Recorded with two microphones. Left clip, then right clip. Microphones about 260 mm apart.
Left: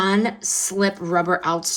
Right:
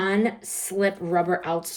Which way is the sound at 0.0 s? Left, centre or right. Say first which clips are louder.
Left 3 dB; left.